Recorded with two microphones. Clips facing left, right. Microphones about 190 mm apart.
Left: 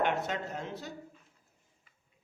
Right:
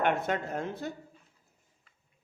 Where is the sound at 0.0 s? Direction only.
55° right (ahead or behind).